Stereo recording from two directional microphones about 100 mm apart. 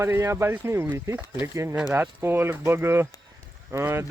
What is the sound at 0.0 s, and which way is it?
Speech, 25° right (ahead or behind).